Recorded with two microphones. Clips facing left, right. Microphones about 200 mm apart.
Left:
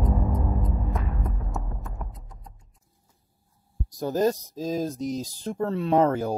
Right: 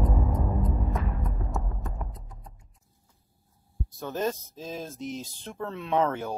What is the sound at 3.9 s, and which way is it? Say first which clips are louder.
Speech: left 6 dB; 35° left (ahead or behind).